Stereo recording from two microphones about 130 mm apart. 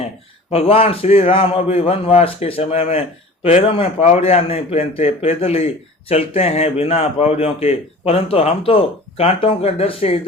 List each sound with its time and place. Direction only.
0.5 s a man's voice: 45° left (ahead or behind)